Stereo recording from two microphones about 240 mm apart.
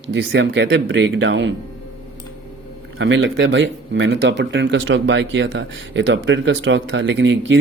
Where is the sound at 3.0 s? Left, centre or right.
Right.